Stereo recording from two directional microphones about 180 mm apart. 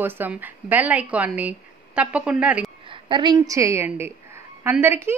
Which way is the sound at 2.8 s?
25° right (ahead or behind).